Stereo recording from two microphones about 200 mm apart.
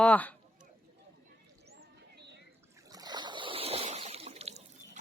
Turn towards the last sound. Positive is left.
turn(degrees=-35)  # may be behind; listen again after turning